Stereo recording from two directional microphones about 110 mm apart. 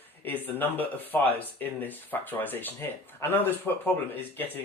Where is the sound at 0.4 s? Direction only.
15° left (ahead or behind).